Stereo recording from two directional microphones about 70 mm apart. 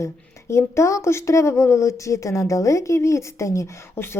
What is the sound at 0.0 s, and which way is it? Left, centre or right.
Speech, left.